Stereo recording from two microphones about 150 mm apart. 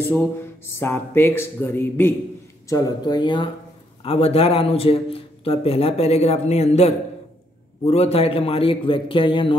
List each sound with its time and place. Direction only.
0.4 s speech: 15° left (ahead or behind)
2.7 s a woman's voice: 25° left (ahead or behind)
4.0 s a man's voice: 40° left (ahead or behind)